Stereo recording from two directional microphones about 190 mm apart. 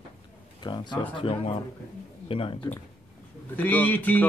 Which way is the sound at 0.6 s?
25° left (ahead or behind).